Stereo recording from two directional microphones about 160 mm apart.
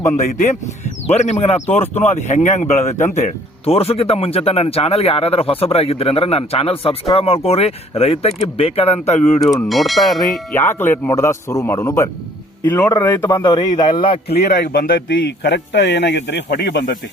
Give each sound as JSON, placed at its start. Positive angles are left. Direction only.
{"t": 0.2, "sound": "a man's voice", "side_deg": 50}
{"t": 9.6, "sound": "speech", "side_deg": 0}
{"t": 10.5, "sound": "a man's voice", "side_deg": 15}
{"t": 14.3, "sound": "a man's voice", "side_deg": 90}